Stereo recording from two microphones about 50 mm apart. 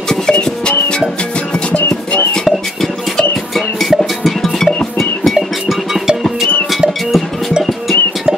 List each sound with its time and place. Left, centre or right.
0.1 s music: centre
2.4 s music: centre